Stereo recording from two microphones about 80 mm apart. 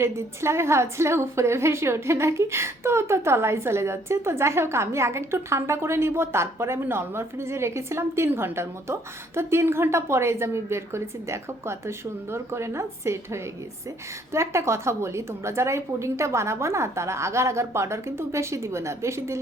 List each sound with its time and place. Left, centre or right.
0.0 s a woman's voice: right